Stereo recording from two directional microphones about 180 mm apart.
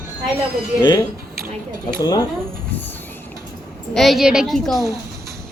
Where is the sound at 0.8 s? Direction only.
25° left (ahead or behind).